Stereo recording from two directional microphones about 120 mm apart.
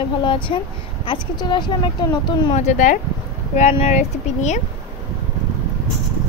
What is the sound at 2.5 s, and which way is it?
Speech, 85° left.